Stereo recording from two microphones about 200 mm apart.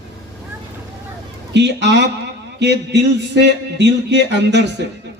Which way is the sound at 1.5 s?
60° right (ahead or behind).